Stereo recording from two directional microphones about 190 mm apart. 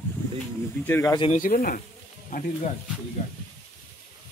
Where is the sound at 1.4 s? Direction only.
45° left (ahead or behind).